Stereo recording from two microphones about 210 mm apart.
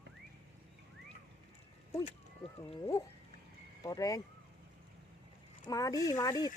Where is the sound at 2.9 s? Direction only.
15° left (ahead or behind).